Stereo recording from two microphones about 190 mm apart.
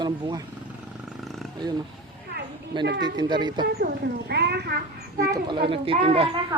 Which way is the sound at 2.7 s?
25° right (ahead or behind).